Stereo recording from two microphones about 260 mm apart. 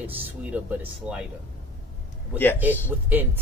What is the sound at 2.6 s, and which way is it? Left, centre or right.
Speech, centre.